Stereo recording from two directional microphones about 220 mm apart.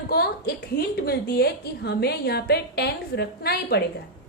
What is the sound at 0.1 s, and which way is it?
A woman's voice, 45° left (ahead or behind).